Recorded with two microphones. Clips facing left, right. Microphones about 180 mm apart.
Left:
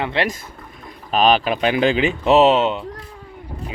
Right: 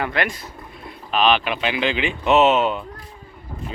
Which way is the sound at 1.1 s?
40° left (ahead or behind).